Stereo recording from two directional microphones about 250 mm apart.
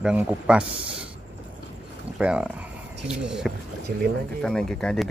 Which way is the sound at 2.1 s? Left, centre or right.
Centre.